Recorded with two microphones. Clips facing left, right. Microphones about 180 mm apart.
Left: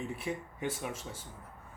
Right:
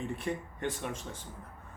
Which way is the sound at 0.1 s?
5° left (ahead or behind).